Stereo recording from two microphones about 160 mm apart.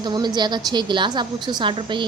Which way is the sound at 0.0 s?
25° right (ahead or behind).